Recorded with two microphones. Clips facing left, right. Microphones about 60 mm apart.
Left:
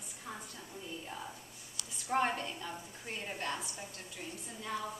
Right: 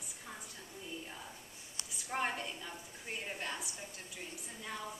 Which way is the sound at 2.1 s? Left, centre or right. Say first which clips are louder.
Left 5 dB; centre.